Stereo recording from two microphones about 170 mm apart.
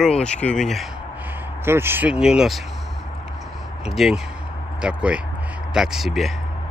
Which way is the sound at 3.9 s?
Centre (ahead or behind).